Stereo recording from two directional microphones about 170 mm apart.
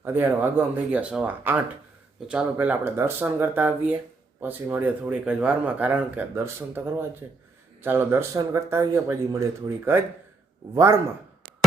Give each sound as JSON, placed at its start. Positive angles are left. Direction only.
{"t": 0.0, "sound": "speech", "side_deg": -10}